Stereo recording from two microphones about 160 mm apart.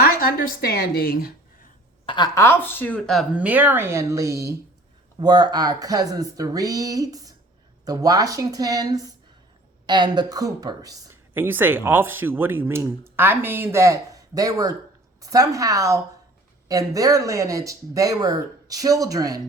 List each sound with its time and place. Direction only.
0.0 s a woman's voice: 65° left (ahead or behind)
2.0 s a woman's voice: 25° left (ahead or behind); by 19.4 s 20° right (ahead or behind)